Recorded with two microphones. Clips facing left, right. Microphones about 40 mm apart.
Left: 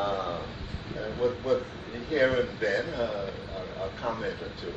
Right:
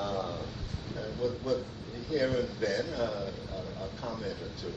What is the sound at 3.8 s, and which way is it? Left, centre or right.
Speech, left.